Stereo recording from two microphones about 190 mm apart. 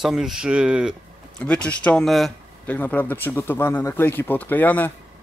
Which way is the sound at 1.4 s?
5° left (ahead or behind).